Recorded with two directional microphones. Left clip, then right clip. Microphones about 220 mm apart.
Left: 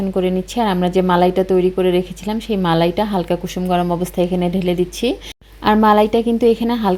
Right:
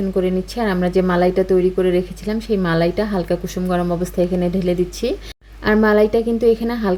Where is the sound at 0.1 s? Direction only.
20° left (ahead or behind).